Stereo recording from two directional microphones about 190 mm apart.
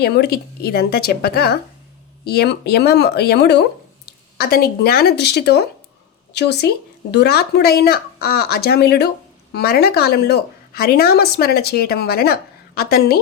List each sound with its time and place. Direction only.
0.0 s a woman's voice: 55° left (ahead or behind)